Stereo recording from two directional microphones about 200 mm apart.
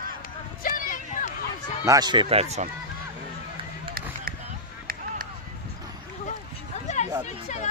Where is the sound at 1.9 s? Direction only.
20° right (ahead or behind).